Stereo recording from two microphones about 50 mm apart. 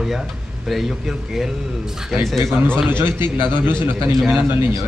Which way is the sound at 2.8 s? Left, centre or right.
Right.